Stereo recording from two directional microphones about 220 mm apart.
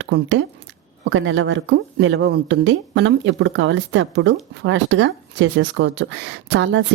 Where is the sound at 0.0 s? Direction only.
55° right (ahead or behind).